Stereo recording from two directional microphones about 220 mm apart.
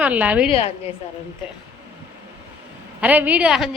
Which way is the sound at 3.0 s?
5° right (ahead or behind).